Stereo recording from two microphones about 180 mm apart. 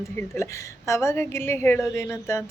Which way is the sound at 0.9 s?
15° left (ahead or behind).